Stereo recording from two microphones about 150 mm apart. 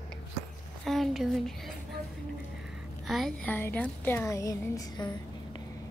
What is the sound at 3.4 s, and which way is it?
Speech, 10° left (ahead or behind).